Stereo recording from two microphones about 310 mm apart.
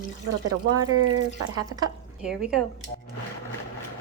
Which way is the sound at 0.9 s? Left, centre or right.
Right.